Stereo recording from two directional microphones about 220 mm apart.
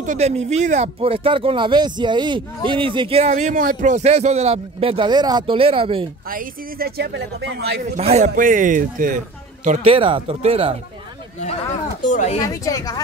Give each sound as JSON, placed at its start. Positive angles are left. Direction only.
{"t": 0.0, "sound": "speech", "side_deg": -30}
{"t": 6.2, "sound": "speech", "side_deg": -40}
{"t": 8.0, "sound": "a man's voice", "side_deg": -30}
{"t": 9.7, "sound": "speech", "side_deg": -25}
{"t": 12.0, "sound": "speech", "side_deg": 35}
{"t": 12.4, "sound": "a woman's voice", "side_deg": 15}